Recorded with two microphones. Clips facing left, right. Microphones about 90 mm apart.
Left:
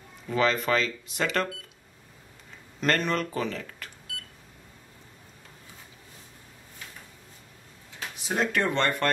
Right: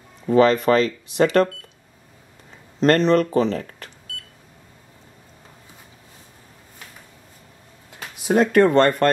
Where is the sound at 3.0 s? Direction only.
40° right (ahead or behind).